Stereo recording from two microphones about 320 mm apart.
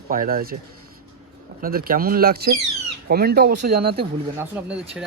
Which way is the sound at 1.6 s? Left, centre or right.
Right.